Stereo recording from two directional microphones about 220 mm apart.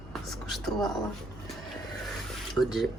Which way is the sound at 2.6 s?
Centre (ahead or behind).